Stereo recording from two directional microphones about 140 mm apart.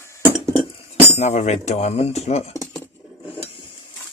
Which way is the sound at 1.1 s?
55° left (ahead or behind).